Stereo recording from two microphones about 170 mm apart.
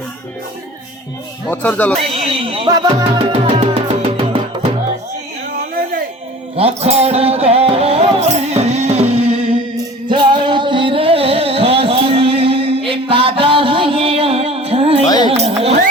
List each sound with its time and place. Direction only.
1.5 s speech: 10° left (ahead or behind)
2.2 s a sound: 35° right (ahead or behind)
2.6 s music: 25° right (ahead or behind)
6.6 s music: 35° right (ahead or behind)
15.0 s music: 25° left (ahead or behind)
15.3 s a sound: 35° right (ahead or behind)